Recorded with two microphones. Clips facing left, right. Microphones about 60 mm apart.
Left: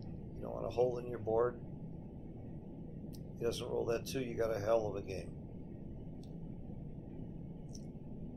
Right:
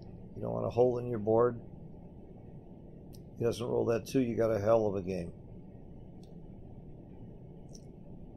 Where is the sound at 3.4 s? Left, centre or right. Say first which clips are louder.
Right 6 dB; right.